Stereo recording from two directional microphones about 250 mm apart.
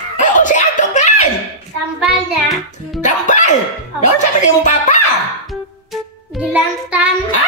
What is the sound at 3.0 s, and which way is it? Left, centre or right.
Music, left.